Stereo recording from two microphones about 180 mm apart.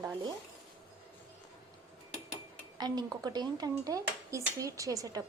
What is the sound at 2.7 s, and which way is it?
Speech, 25° right (ahead or behind).